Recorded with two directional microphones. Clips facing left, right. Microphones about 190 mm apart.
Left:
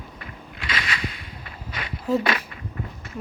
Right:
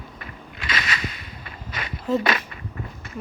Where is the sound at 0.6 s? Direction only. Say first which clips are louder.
Right 1 dB; 45° right (ahead or behind).